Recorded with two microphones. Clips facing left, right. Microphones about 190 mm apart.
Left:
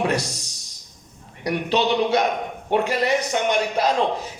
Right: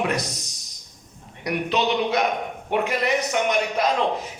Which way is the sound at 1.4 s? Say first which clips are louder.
Left 2 dB; 30° left (ahead or behind).